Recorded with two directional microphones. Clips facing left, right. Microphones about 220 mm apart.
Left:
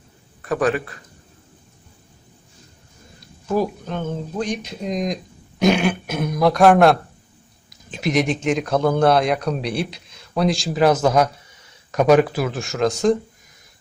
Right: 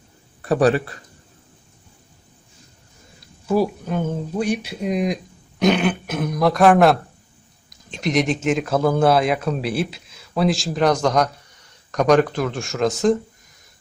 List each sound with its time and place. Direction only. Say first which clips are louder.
0.4 s a man's voice: right 3 dB; 35° right (ahead or behind)
3.4 s speech: right 2 dB; 10° right (ahead or behind)